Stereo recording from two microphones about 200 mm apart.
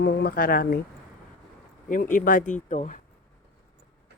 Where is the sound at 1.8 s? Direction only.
40° left (ahead or behind).